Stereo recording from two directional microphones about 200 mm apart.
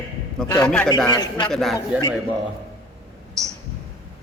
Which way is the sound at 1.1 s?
20° left (ahead or behind).